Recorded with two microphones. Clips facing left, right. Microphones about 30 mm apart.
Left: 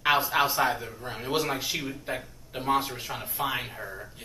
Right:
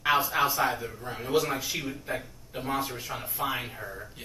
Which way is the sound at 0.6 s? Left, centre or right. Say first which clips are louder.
Left 1 dB; centre.